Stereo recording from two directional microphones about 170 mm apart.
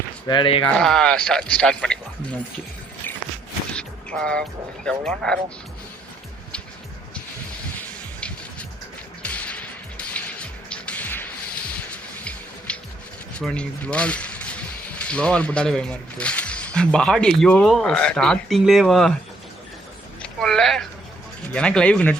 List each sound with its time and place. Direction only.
0.3 s speech: 30° left (ahead or behind)
0.8 s speech: 5° left (ahead or behind)
3.8 s speech: 5° left (ahead or behind)
7.8 s music: 5° left (ahead or behind)
13.4 s speech: 5° left (ahead or behind)
20.2 s a sound: 5° left (ahead or behind)
21.5 s speech: 5° left (ahead or behind)